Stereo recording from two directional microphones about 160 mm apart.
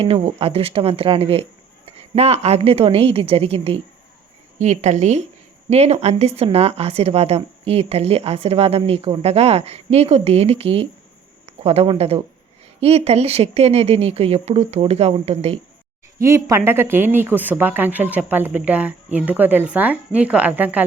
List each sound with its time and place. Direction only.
0.0 s a woman's voice: 35° right (ahead or behind)
16.1 s speech: 20° right (ahead or behind)